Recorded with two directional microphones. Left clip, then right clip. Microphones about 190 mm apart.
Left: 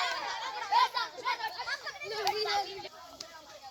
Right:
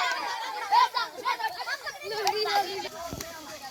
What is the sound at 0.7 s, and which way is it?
Children playing, 5° left (ahead or behind).